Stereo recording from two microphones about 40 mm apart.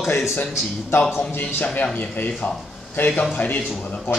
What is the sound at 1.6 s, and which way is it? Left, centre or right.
Speech, left.